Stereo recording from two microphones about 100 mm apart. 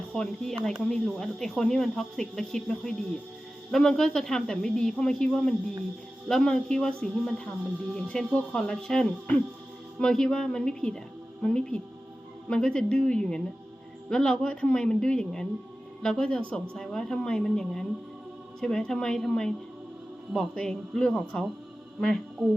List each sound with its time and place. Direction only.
0.1 s speech: 5° left (ahead or behind)